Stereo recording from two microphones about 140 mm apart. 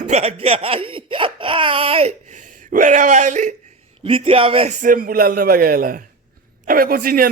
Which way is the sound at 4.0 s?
40° right (ahead or behind).